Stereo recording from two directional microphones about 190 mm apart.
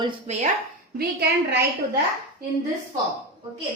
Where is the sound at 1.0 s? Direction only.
55° right (ahead or behind).